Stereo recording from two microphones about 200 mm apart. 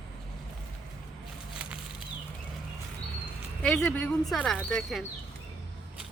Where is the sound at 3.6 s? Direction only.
5° left (ahead or behind).